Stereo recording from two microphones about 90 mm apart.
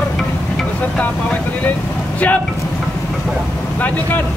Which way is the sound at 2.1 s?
20° left (ahead or behind).